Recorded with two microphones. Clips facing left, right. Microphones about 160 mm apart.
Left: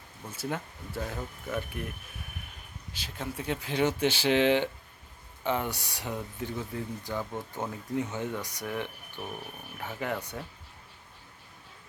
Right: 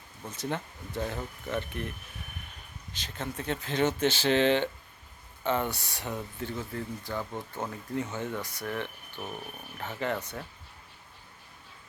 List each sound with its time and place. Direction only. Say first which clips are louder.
0.3 s speech: right 1 dB; 5° left (ahead or behind)
2.9 s speech: even; 10° left (ahead or behind)